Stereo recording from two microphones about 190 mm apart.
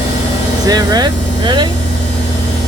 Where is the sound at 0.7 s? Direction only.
20° right (ahead or behind).